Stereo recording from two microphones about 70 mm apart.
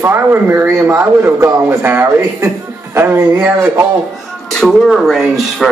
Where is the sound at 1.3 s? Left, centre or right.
Right.